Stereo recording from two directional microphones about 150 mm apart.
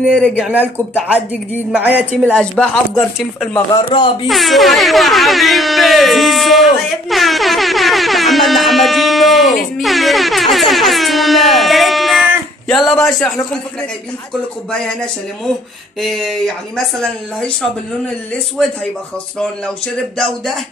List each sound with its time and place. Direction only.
0.4 s speech: 10° right (ahead or behind)
2.3 s air horn: 5° left (ahead or behind)
3.7 s speech: 35° left (ahead or behind)
4.3 s air horn: centre (ahead or behind)
14.7 s air horn: 5° left (ahead or behind)
19.3 s air horn: 5° left (ahead or behind)